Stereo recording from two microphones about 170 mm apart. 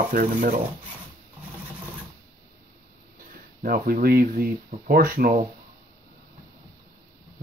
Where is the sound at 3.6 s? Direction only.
60° right (ahead or behind).